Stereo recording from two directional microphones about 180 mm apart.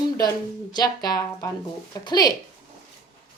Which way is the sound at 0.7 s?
20° left (ahead or behind).